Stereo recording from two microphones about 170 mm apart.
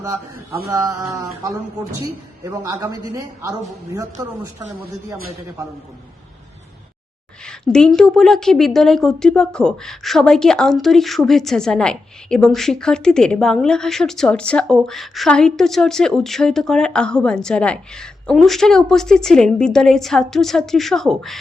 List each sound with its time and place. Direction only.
0.7 s a man's voice: 20° right (ahead or behind)
7.4 s a woman's voice: 5° left (ahead or behind)